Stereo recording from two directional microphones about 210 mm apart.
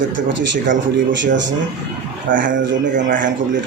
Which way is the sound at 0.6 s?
60° right (ahead or behind).